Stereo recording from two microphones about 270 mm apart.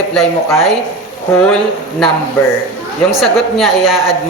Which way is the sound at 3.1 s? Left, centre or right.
Centre.